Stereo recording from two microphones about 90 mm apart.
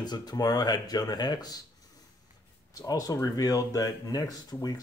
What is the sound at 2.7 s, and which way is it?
Speech, 45° left (ahead or behind).